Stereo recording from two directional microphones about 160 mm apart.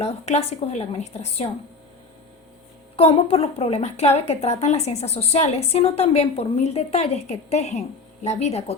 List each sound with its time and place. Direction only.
0.0 s a woman's voice: 40° left (ahead or behind)
2.9 s a woman's voice: 35° left (ahead or behind)